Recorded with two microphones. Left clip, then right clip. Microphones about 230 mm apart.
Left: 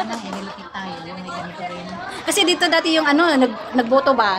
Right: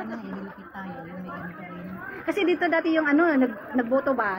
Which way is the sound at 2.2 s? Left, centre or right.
Left.